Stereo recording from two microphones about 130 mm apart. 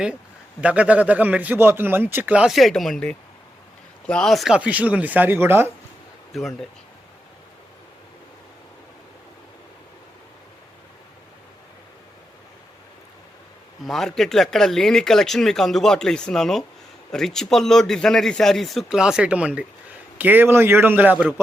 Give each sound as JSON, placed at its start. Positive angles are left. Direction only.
{"t": 0.6, "sound": "a man's voice", "side_deg": -10}
{"t": 6.3, "sound": "speech", "side_deg": 0}
{"t": 13.8, "sound": "a man's voice", "side_deg": 0}